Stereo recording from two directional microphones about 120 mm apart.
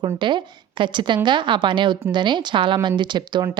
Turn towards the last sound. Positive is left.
turn(degrees=-40)  # may be behind; listen again after turning